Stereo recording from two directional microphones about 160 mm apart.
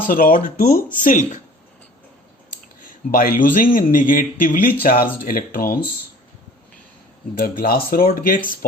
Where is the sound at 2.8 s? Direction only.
60° left (ahead or behind).